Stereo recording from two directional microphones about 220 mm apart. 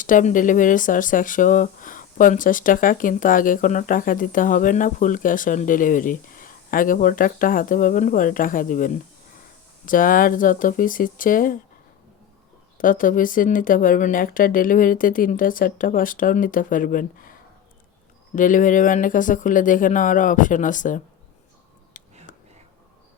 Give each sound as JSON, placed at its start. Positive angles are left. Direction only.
{"t": 0.0, "sound": "speech", "side_deg": 35}
{"t": 12.7, "sound": "speech", "side_deg": 40}
{"t": 18.3, "sound": "speech", "side_deg": 35}
{"t": 22.0, "sound": "whispering", "side_deg": 35}